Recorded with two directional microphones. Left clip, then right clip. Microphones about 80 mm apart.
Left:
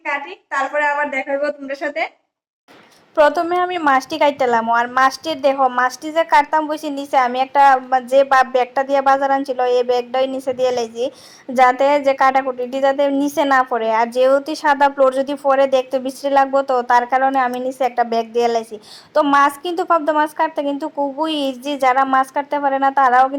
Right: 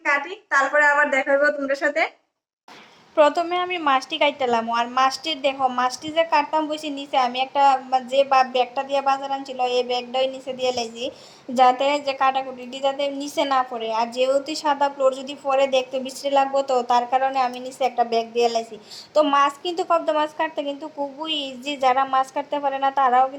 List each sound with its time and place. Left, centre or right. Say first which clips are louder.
0.0 s a child's voice: right 1 dB; centre
3.2 s a woman's voice: left 4 dB; left